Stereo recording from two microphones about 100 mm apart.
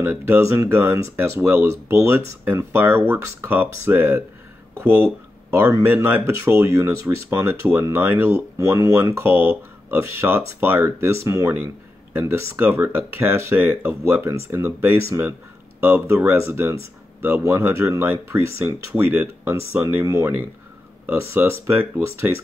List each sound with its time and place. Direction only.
0.0 s speech: 25° right (ahead or behind)
8.9 s speech: 20° right (ahead or behind)
11.5 s speech: 20° right (ahead or behind)